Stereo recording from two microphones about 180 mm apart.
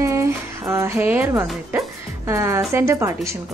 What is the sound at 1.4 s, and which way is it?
Speech, centre (ahead or behind).